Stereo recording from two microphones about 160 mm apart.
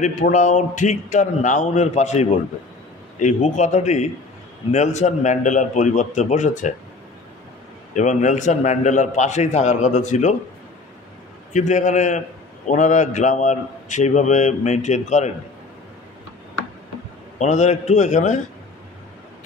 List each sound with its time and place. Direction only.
0.0 s a man's voice: 50° left (ahead or behind)
7.9 s a man's voice: 50° left (ahead or behind)
11.5 s a man's voice: 50° left (ahead or behind)
17.4 s a man's voice: 45° left (ahead or behind)